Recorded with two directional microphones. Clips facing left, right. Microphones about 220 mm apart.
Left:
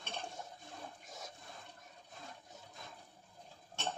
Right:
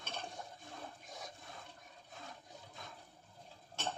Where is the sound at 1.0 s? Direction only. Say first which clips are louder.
Right 1 dB; centre (ahead or behind).